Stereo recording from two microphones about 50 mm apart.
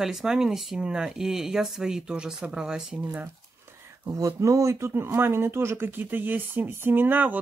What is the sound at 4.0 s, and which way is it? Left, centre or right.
Speech, right.